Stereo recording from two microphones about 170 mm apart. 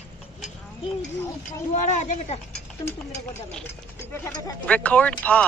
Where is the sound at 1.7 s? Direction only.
45° left (ahead or behind).